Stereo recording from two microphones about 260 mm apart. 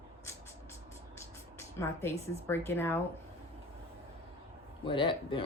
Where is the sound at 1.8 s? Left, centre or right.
Centre.